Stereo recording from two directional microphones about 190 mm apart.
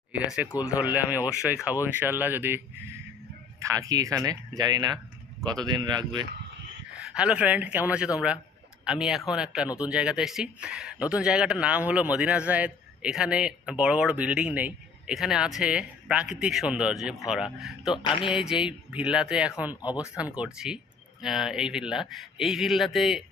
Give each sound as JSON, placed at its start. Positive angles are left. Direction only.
{"t": 0.1, "sound": "speech", "side_deg": -5}
{"t": 6.9, "sound": "speech", "side_deg": -5}
{"t": 17.9, "sound": "speech", "side_deg": 25}
{"t": 18.3, "sound": "speech", "side_deg": -5}